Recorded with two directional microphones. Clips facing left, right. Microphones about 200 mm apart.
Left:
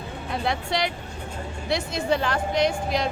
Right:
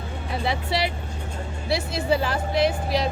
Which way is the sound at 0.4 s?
5° right (ahead or behind).